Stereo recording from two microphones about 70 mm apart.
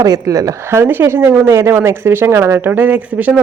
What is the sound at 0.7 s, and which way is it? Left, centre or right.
Speech, right.